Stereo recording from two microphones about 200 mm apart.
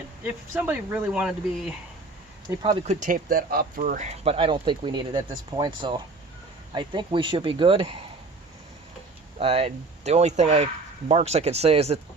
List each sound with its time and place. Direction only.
0.5 s speech: 10° right (ahead or behind)
2.5 s speech: 15° right (ahead or behind)
2.8 s speech: 35° right (ahead or behind)
9.4 s speech: 30° right (ahead or behind)